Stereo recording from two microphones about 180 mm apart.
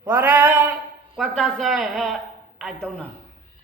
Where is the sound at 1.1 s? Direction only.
Centre (ahead or behind).